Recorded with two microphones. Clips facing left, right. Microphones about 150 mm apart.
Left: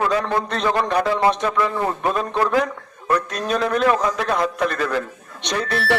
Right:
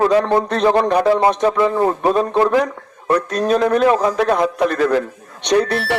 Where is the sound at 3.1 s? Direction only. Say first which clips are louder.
Right 5 dB; 35° right (ahead or behind).